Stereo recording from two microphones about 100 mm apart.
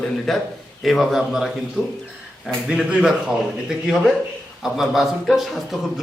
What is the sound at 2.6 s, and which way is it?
Speech, 10° right (ahead or behind).